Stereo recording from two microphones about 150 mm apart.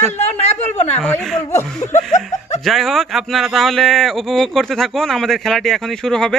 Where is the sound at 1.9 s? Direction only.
55° left (ahead or behind).